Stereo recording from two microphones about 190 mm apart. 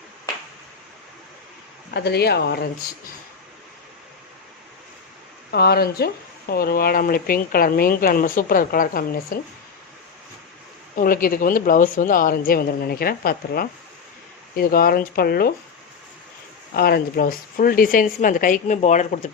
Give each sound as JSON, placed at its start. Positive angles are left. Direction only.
{"t": 1.9, "sound": "speech", "side_deg": 60}
{"t": 5.5, "sound": "speech", "side_deg": 55}
{"t": 10.9, "sound": "speech", "side_deg": 50}
{"t": 16.7, "sound": "speech", "side_deg": 55}